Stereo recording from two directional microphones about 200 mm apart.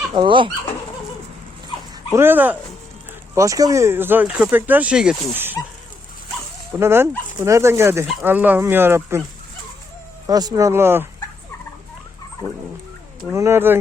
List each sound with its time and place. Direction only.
0.1 s speech: 25° right (ahead or behind)
2.1 s speech: 10° right (ahead or behind)
6.7 s speech: 10° right (ahead or behind)
10.2 s speech: 20° right (ahead or behind)
13.3 s speech: 15° right (ahead or behind)